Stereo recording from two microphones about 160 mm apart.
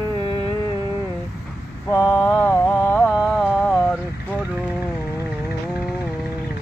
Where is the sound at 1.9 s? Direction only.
15° left (ahead or behind).